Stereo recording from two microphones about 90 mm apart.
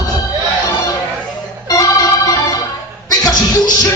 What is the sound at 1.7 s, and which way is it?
Organ, 40° left (ahead or behind).